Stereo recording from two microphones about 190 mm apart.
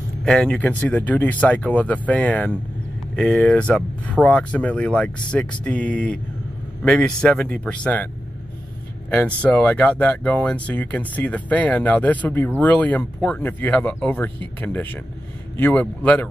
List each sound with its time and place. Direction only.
0.2 s speech: 5° left (ahead or behind)
9.1 s speech: 10° left (ahead or behind)